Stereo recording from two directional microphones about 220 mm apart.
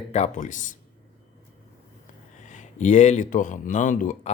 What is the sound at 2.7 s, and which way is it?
Speech, 35° left (ahead or behind).